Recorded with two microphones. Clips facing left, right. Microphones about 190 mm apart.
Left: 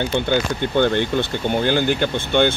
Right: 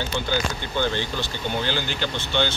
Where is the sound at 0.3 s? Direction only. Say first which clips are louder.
Left 7 dB; 55° left (ahead or behind).